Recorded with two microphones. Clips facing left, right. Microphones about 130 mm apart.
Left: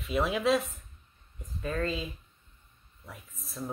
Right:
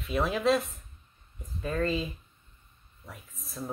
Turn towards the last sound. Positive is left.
turn(degrees=0)  # may be behind; listen again after turning